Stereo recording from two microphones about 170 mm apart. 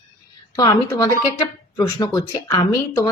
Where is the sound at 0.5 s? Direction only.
20° left (ahead or behind).